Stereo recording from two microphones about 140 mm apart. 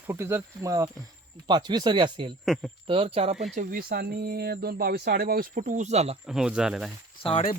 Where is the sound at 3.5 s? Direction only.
70° right (ahead or behind); by 6.1 s 50° right (ahead or behind).